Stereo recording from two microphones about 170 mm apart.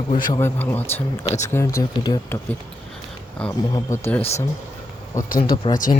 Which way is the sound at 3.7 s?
15° left (ahead or behind).